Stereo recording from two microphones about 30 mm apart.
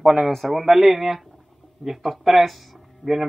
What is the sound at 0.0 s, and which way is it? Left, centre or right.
Speech, centre.